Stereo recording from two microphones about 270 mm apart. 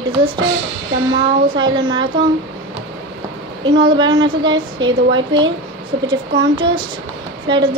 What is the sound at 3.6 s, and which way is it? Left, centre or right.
A woman's voice, centre.